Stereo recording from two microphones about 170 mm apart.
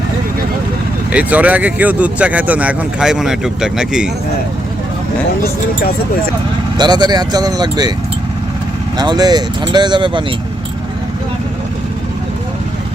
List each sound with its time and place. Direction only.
1.1 s speech: 10° right (ahead or behind)
6.7 s speech: 25° right (ahead or behind)
9.0 s speech: 25° right (ahead or behind)